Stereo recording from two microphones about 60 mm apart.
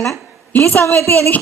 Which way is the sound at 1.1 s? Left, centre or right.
Left.